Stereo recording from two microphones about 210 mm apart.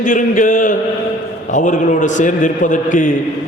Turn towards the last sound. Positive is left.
turn(degrees=35)  # may be behind; listen again after turning